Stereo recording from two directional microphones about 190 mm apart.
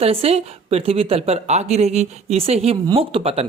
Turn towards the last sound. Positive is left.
turn(degrees=-30)  # may be behind; listen again after turning